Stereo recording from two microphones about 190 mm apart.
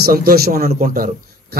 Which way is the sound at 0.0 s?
50° right (ahead or behind).